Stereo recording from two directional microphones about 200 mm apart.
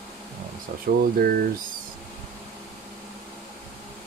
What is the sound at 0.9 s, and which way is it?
Speech, 40° right (ahead or behind).